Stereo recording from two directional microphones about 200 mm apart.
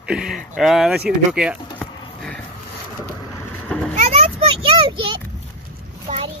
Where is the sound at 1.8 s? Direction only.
5° left (ahead or behind).